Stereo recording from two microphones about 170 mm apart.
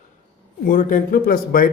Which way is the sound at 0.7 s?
50° left (ahead or behind).